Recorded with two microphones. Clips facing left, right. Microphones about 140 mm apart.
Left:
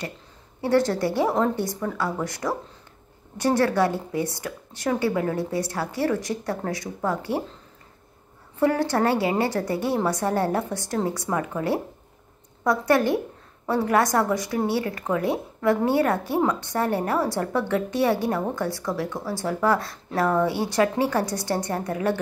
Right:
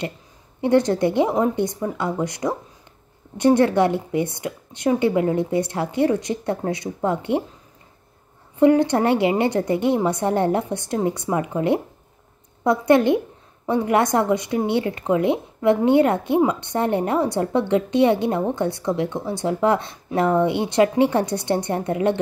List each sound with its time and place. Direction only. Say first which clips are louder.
0.6 s a woman's voice: right 4 dB; 20° right (ahead or behind)
8.5 s a woman's voice: right 6 dB; 20° right (ahead or behind)